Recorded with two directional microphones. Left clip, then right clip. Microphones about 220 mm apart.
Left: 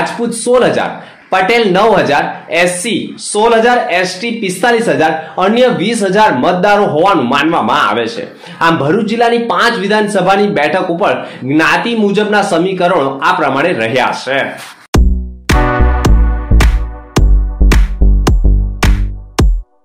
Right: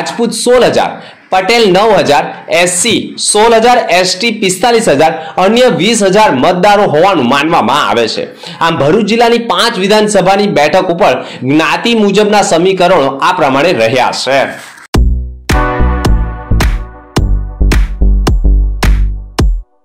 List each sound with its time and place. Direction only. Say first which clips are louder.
0.0 s speech: right 3 dB; 30° right (ahead or behind)
15.4 s music: even; centre (ahead or behind)